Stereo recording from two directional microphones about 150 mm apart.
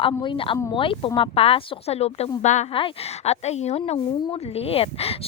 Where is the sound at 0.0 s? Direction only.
35° left (ahead or behind); by 2.6 s 50° left (ahead or behind).